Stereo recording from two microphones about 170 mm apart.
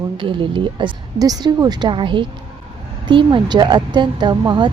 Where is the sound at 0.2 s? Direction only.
30° right (ahead or behind).